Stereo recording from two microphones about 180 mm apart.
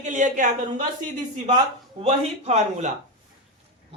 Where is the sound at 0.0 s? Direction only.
45° right (ahead or behind).